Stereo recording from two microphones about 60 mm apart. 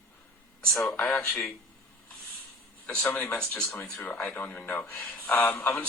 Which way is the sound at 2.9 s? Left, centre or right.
Centre.